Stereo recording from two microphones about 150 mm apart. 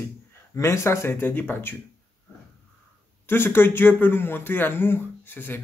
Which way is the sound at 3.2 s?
15° left (ahead or behind).